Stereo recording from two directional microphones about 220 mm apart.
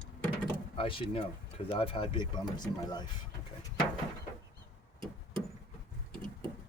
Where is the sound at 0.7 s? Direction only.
25° left (ahead or behind).